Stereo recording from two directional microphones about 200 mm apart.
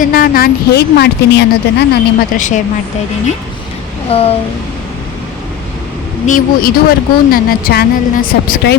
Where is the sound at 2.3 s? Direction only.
40° left (ahead or behind).